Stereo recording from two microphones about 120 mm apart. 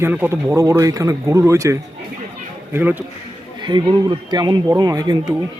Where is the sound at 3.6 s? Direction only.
40° right (ahead or behind).